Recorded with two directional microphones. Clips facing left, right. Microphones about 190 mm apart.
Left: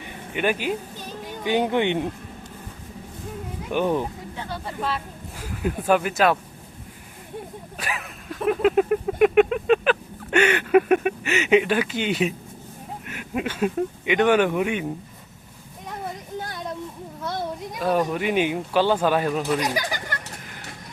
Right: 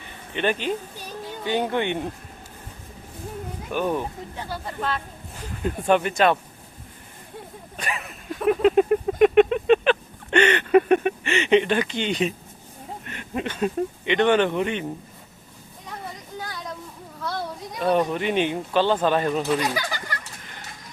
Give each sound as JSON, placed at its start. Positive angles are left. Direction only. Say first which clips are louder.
{"t": 0.0, "sound": "a sound", "louder": "left 1 dB", "side_deg": 10}
{"t": 1.5, "sound": "speech", "louder": "left 3 dB", "side_deg": 15}
{"t": 3.7, "sound": "speech", "louder": "left 2 dB", "side_deg": 15}
{"t": 4.4, "sound": "speech", "louder": "left 1 dB", "side_deg": -5}
{"t": 7.8, "sound": "a sound", "louder": "right 1 dB", "side_deg": 0}
{"t": 13.1, "sound": "speech", "louder": "left 2 dB", "side_deg": 5}
{"t": 16.4, "sound": "a sound", "louder": "left 1 dB", "side_deg": 25}
{"t": 17.2, "sound": "children playing", "louder": "left 1 dB", "side_deg": 20}
{"t": 17.7, "sound": "speech", "louder": "right 1 dB", "side_deg": 0}